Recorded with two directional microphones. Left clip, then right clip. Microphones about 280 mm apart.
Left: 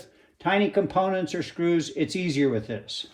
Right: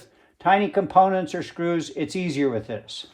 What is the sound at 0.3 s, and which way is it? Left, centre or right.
Speech, right.